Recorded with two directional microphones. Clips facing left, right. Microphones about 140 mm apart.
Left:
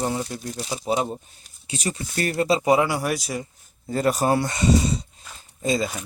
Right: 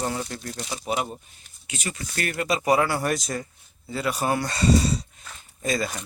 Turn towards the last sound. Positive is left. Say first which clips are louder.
# left 3 dB
turn(degrees=25)  # may be behind; listen again after turning